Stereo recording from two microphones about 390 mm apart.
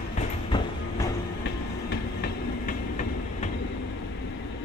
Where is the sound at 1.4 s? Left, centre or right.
Left.